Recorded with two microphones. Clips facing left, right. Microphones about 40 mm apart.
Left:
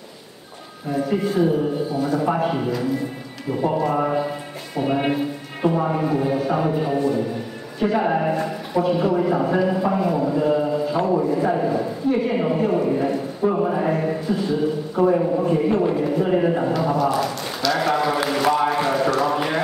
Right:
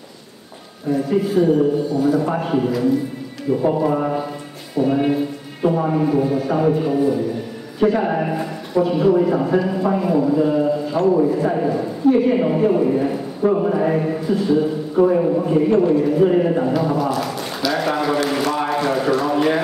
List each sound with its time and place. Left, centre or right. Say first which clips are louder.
0.8 s a man's voice: right 3 dB; centre
4.7 s music: right 4 dB; centre
5.1 s a man's voice: right 2 dB; centre
18.4 s a sound: left 1 dB; centre
18.9 s speech: right 2 dB; centre